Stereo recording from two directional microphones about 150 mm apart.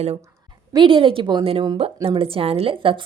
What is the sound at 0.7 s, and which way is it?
A woman's voice, 35° right (ahead or behind).